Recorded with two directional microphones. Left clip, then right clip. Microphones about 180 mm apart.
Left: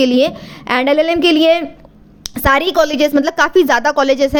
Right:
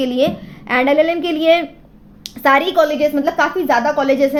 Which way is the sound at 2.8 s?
60° left (ahead or behind).